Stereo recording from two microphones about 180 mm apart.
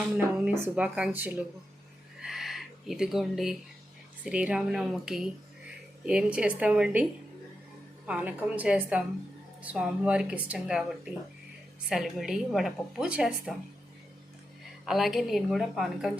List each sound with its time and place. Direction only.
0.0 s speech: 5° right (ahead or behind)
2.2 s a sound: centre (ahead or behind)
4.2 s a woman's voice: 5° right (ahead or behind)
14.8 s a woman's voice: centre (ahead or behind)